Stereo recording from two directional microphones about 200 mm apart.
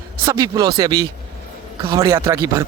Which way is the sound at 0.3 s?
20° right (ahead or behind).